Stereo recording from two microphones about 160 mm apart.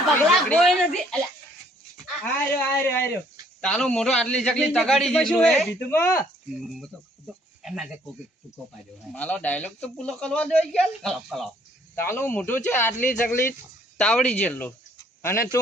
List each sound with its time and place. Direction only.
0.4 s a sound: 5° left (ahead or behind)
2.4 s speech: 15° left (ahead or behind)
3.6 s a man's voice: 5° left (ahead or behind)
6.7 s speech: centre (ahead or behind)
9.1 s speech: 10° left (ahead or behind)
11.9 s speech: 15° left (ahead or behind)